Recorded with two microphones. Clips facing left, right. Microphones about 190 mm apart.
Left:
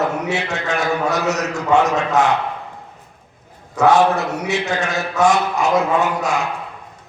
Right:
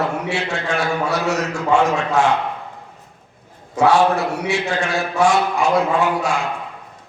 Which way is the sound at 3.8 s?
20° left (ahead or behind).